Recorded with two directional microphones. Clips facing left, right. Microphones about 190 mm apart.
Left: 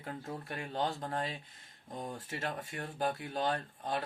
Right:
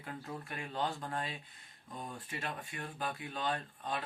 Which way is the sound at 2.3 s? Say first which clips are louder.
Left 3 dB; 40° left (ahead or behind).